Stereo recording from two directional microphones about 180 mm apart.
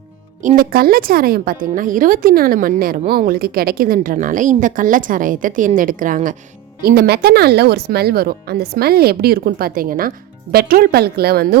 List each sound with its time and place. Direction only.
0.4 s a woman's voice: 50° right (ahead or behind)
6.8 s speech: 60° right (ahead or behind)